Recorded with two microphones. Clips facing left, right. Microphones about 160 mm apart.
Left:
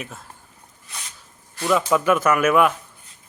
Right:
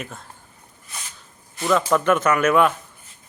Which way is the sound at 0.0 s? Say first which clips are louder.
Right 1 dB; centre (ahead or behind).